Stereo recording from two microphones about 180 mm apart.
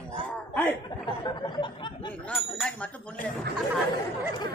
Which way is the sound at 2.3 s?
Centre (ahead or behind).